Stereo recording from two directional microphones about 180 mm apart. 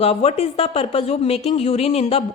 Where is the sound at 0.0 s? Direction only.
35° left (ahead or behind).